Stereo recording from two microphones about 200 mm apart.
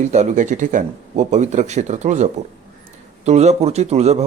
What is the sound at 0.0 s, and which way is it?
Speech, 35° right (ahead or behind).